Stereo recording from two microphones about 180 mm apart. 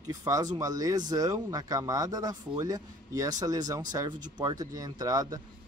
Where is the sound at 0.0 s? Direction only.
20° right (ahead or behind).